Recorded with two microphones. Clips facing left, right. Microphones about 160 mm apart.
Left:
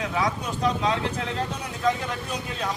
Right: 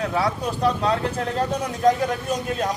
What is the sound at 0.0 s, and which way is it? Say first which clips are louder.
Speech: right 3 dB; 40° right (ahead or behind).